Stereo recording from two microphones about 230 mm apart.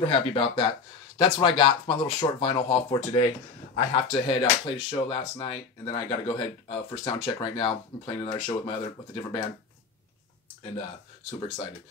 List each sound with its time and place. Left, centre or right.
0.0 s speech: left